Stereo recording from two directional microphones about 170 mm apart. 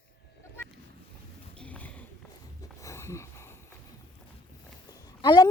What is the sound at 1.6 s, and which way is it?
Clip-clop, 10° left (ahead or behind).